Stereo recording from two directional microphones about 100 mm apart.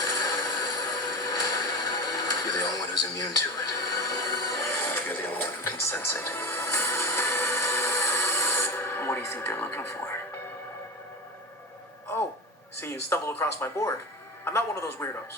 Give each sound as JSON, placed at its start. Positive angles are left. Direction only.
{"t": 0.0, "sound": "a sound", "side_deg": 40}
{"t": 5.1, "sound": "music", "side_deg": 20}
{"t": 12.7, "sound": "speech", "side_deg": 25}